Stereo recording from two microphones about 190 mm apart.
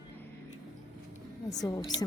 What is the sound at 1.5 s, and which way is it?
Speech, 20° left (ahead or behind).